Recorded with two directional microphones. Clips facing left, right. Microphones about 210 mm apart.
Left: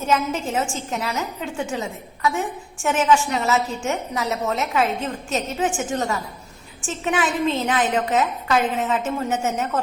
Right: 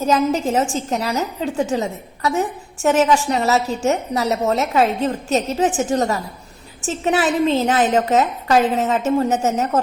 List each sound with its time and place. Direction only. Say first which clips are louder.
0.0 s a woman's voice: right 5 dB; 35° right (ahead or behind)